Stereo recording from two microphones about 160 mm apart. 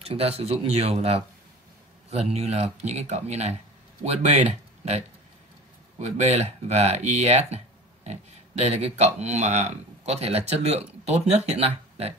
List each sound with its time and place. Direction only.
0.0 s speech: 40° right (ahead or behind)